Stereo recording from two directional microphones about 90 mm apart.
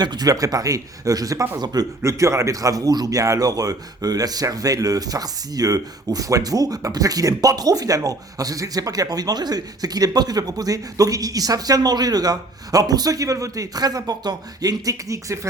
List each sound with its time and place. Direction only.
0.0 s speech: 50° right (ahead or behind)
2.0 s speech: 35° right (ahead or behind)